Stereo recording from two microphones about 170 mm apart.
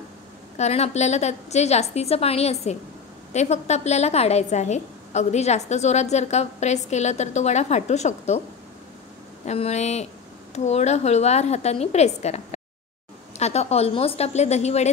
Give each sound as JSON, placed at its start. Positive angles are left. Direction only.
{"t": 0.6, "sound": "a woman's voice", "side_deg": 40}
{"t": 9.5, "sound": "a woman's voice", "side_deg": 40}